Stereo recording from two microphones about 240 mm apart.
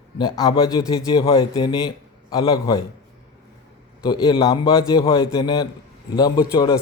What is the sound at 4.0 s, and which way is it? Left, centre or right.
A man's voice, centre.